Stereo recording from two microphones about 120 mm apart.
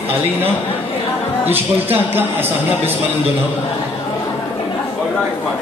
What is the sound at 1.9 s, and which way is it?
Speech, 20° right (ahead or behind).